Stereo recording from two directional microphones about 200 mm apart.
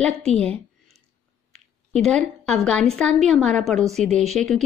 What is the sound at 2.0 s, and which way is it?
A woman's voice, 5° left (ahead or behind).